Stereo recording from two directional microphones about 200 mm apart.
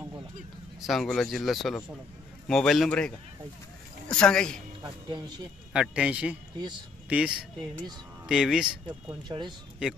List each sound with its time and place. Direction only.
0.7 s speech: centre (ahead or behind)
4.1 s speech: 5° left (ahead or behind)
4.8 s speech: 20° right (ahead or behind)
5.7 s speech: 5° right (ahead or behind)
9.3 s speech: 15° right (ahead or behind)